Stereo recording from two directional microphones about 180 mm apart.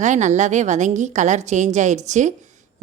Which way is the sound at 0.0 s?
40° right (ahead or behind).